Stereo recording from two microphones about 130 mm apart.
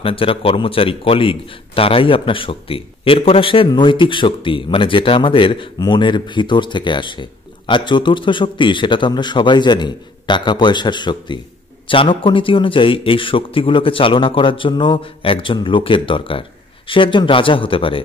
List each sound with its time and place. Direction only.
0.0 s speech: 45° left (ahead or behind)